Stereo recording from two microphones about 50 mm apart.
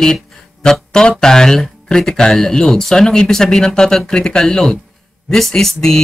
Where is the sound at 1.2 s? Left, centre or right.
Centre.